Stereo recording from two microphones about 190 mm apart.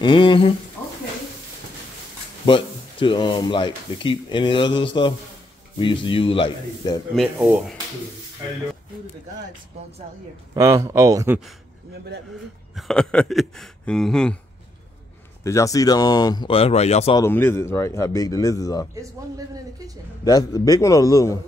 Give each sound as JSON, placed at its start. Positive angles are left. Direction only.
{"t": 0.0, "sound": "speech", "side_deg": 25}
{"t": 0.8, "sound": "a sound", "side_deg": 15}
{"t": 2.4, "sound": "speech", "side_deg": 25}
{"t": 7.2, "sound": "speech", "side_deg": 0}
{"t": 10.5, "sound": "speech", "side_deg": -15}
{"t": 12.7, "sound": "speech", "side_deg": 0}
{"t": 15.4, "sound": "speech", "side_deg": 15}
{"t": 17.2, "sound": "speech", "side_deg": 10}
{"t": 18.9, "sound": "a man's voice", "side_deg": -20}
{"t": 20.2, "sound": "speech", "side_deg": 20}